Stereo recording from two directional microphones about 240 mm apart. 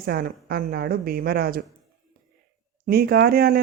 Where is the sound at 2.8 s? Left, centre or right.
Right.